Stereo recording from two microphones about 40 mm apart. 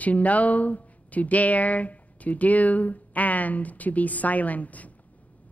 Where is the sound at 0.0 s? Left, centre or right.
Left.